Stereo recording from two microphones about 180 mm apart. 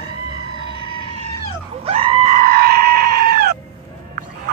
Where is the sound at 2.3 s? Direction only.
55° right (ahead or behind).